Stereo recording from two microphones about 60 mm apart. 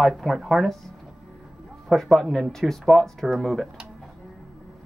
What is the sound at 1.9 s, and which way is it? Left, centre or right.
Speech, centre.